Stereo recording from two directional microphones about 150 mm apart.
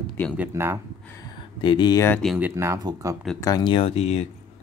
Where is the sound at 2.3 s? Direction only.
15° right (ahead or behind).